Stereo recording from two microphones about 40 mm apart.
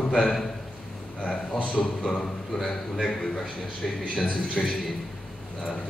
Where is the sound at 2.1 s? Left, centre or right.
Centre.